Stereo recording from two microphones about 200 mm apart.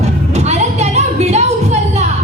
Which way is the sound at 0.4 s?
35° right (ahead or behind).